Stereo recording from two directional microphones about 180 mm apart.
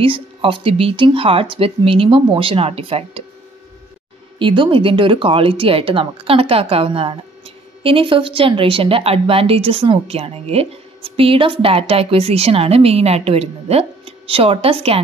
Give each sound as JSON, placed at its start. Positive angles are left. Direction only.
{"t": 0.0, "sound": "speech", "side_deg": -30}
{"t": 4.4, "sound": "speech", "side_deg": -30}